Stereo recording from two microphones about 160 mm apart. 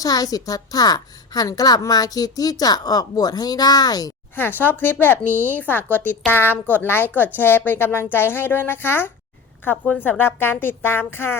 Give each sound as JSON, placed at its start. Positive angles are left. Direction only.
{"t": 0.0, "sound": "a woman's voice", "side_deg": 25}
{"t": 4.4, "sound": "a woman's voice", "side_deg": 10}